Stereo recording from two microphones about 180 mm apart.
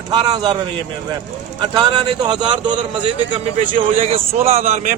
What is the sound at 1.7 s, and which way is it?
A man's voice, 25° right (ahead or behind).